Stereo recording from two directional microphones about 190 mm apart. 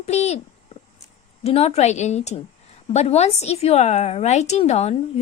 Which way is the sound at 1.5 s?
35° left (ahead or behind).